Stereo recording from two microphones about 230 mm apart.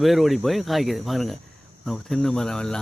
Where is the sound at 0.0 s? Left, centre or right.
Centre.